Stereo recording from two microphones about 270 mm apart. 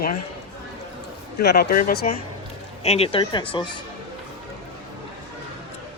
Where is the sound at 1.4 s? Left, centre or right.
Left; by 3.6 s centre.